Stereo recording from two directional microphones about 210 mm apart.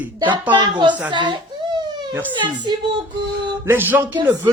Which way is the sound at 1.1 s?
20° right (ahead or behind).